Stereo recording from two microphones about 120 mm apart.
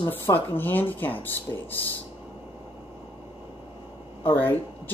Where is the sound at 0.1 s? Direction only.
15° left (ahead or behind).